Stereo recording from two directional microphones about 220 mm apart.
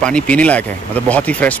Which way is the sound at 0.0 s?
5° left (ahead or behind).